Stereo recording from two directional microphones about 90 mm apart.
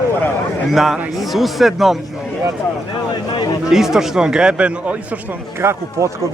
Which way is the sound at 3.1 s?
55° left (ahead or behind).